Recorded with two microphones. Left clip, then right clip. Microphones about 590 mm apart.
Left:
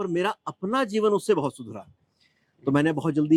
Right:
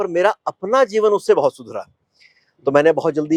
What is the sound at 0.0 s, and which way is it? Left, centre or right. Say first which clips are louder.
Speech: right 10 dB; right.